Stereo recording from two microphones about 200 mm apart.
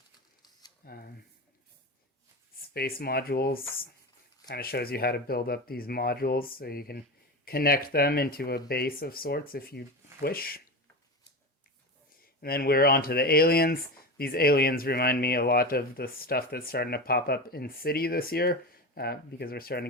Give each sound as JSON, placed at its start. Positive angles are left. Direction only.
{"t": 0.9, "sound": "speech", "side_deg": 50}
{"t": 2.6, "sound": "speech", "side_deg": 50}
{"t": 12.2, "sound": "speech", "side_deg": 50}